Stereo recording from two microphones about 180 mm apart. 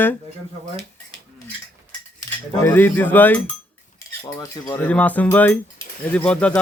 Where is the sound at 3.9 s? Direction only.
20° left (ahead or behind).